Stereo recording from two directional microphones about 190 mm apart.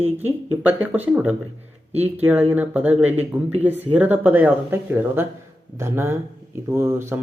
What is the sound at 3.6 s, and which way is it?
Speech, 10° right (ahead or behind).